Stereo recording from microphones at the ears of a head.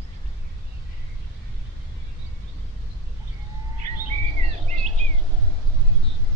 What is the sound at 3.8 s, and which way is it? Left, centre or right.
Bird, right.